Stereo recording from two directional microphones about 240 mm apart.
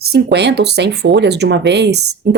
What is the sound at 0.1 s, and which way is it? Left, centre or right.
Speech, right.